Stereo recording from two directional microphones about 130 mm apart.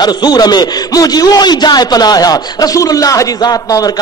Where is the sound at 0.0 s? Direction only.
30° left (ahead or behind).